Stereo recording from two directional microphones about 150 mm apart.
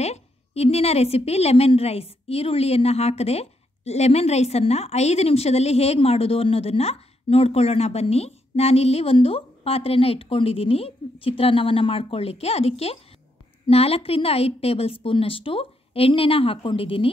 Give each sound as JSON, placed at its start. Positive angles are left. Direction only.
{"t": 0.0, "sound": "a woman's voice", "side_deg": 45}